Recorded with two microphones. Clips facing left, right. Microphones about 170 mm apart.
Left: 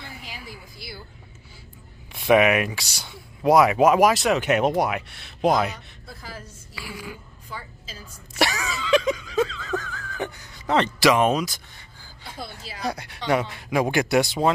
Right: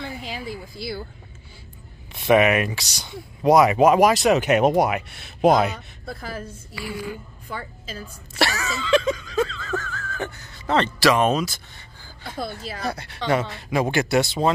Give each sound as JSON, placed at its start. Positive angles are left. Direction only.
{"t": 2.2, "sound": "speech", "side_deg": 5}
{"t": 6.0, "sound": "a woman's voice", "side_deg": -60}
{"t": 6.7, "sound": "speech", "side_deg": 5}
{"t": 7.4, "sound": "a woman's voice", "side_deg": -60}
{"t": 8.6, "sound": "a sound", "side_deg": 10}
{"t": 12.2, "sound": "speech", "side_deg": -55}
{"t": 12.8, "sound": "speech", "side_deg": 10}